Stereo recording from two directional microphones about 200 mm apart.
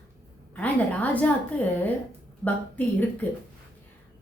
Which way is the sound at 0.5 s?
5° left (ahead or behind).